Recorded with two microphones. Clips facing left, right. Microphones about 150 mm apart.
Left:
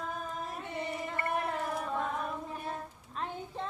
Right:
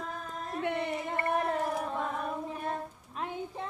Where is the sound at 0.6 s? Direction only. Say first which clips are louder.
Right 7 dB; 70° right (ahead or behind).